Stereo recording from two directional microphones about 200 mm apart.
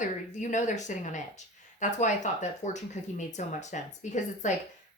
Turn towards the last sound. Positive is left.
turn(degrees=35)  # may be behind; listen again after turning